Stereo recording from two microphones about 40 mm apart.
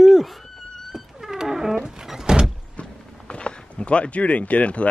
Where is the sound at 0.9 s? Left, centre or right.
Centre.